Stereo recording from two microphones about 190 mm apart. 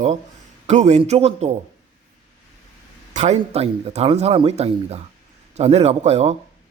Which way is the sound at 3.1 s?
35° right (ahead or behind).